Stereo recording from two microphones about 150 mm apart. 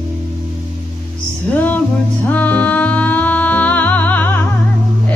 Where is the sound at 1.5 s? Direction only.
10° left (ahead or behind).